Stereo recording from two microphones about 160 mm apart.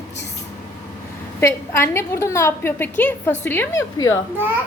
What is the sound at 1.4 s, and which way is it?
A woman's voice, 15° left (ahead or behind).